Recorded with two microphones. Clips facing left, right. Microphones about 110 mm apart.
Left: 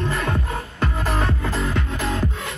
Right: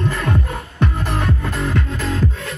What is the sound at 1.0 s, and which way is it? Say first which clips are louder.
Music: right 1 dB; 30° left (ahead or behind).